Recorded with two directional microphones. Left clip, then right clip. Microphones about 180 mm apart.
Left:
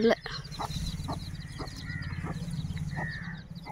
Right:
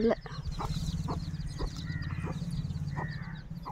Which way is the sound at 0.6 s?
35° left (ahead or behind).